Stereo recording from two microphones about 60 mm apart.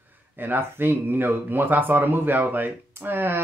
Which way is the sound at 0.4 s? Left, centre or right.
Right.